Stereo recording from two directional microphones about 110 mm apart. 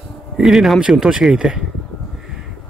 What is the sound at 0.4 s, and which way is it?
Speech, 5° right (ahead or behind).